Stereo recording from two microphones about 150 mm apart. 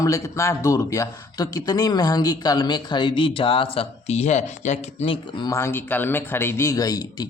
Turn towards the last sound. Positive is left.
turn(degrees=25)  # may be behind; listen again after turning